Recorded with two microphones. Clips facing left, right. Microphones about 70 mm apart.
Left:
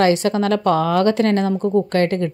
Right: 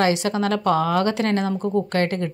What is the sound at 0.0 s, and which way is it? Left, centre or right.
A woman's voice, left.